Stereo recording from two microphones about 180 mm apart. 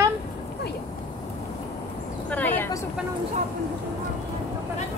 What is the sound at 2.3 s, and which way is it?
Speech, 10° left (ahead or behind).